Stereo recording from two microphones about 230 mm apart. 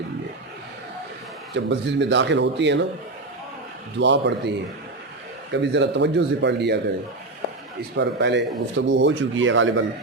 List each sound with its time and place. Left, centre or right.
1.5 s speech: right
4.0 s speech: right
7.8 s speech: right